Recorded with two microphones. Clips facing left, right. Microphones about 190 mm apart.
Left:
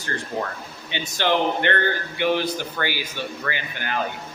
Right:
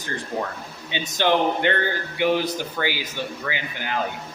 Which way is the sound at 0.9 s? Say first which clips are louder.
Right 2 dB; 15° right (ahead or behind).